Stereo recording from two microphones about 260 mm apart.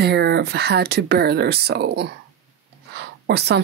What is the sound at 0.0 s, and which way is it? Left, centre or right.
Speech, right.